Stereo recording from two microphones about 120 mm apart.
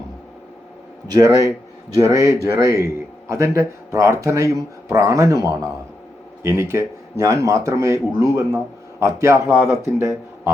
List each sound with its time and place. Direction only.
1.0 s speech: 30° right (ahead or behind)